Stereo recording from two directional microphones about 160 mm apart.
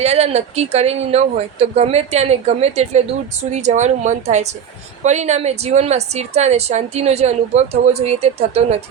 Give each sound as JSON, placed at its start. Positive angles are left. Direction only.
{"t": 0.0, "sound": "a woman's voice", "side_deg": -40}